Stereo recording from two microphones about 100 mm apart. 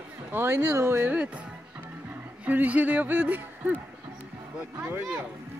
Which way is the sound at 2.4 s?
15° right (ahead or behind).